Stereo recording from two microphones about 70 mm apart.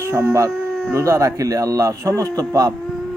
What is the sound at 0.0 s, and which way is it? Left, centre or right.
Speech, right.